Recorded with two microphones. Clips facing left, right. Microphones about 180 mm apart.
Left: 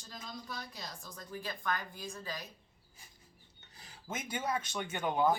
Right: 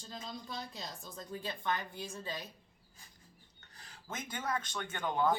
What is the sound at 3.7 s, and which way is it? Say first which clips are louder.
Speech: left 2 dB; 10° left (ahead or behind).